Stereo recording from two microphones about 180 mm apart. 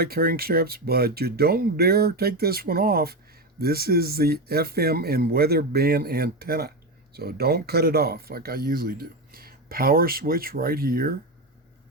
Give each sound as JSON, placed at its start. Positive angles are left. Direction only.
{"t": 0.0, "sound": "speech", "side_deg": -55}